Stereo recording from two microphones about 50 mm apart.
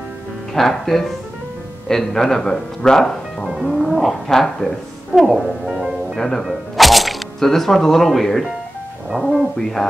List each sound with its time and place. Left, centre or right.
0.6 s speech: centre
6.1 s speech: centre
6.4 s speech: centre
9.1 s speech: right
9.6 s speech: centre